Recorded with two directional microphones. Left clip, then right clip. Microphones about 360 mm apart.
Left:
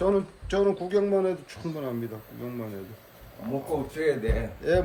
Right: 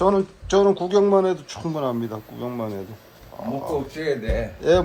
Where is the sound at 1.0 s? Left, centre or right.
Right.